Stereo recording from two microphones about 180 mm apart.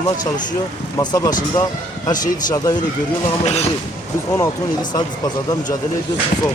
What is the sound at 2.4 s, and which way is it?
Speech, 20° left (ahead or behind).